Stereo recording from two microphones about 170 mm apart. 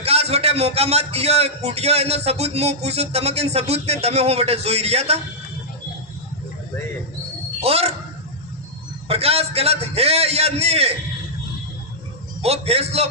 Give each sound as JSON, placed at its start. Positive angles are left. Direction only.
{"t": 0.0, "sound": "a man's voice", "side_deg": -35}
{"t": 7.6, "sound": "a sound", "side_deg": -35}
{"t": 9.0, "sound": "a man's voice", "side_deg": -35}
{"t": 12.4, "sound": "a man's voice", "side_deg": -35}